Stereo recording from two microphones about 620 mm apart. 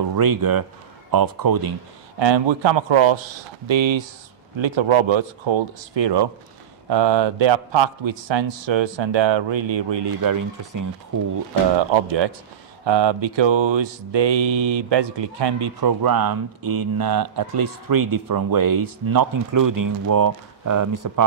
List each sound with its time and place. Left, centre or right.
0.1 s mantra: right
1.1 s a man's voice: right
11.7 s a man's voice: right
12.8 s mantra: right
19.1 s speech: right